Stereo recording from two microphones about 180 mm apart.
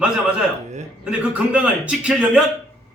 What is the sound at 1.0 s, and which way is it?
A man's voice, 5° right (ahead or behind).